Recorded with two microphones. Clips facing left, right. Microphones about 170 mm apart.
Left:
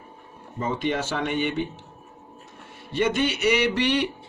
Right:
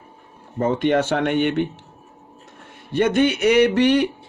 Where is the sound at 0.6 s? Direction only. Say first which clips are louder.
Right 8 dB; 55° right (ahead or behind).